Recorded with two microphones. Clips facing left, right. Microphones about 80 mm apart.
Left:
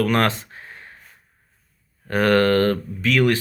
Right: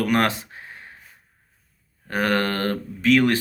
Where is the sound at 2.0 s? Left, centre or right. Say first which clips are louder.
Left 5 dB; centre.